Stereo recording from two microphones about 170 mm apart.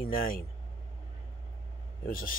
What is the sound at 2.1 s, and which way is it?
Speech, 55° left (ahead or behind).